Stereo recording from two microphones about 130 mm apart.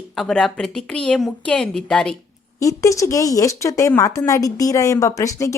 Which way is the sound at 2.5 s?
25° left (ahead or behind).